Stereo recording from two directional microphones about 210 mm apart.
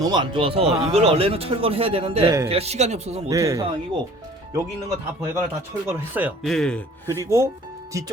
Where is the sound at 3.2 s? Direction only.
15° right (ahead or behind).